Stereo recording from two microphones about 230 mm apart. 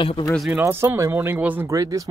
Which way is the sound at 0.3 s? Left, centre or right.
Centre.